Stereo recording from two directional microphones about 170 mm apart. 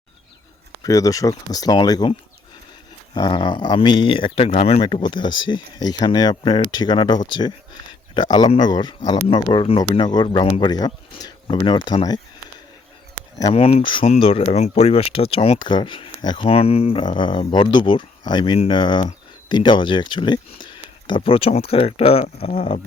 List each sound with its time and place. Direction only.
0.8 s speech: 20° left (ahead or behind)
3.2 s speech: 25° left (ahead or behind)
13.5 s speech: 35° left (ahead or behind)